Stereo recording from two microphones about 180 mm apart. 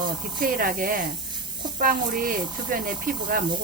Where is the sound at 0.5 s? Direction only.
50° right (ahead or behind).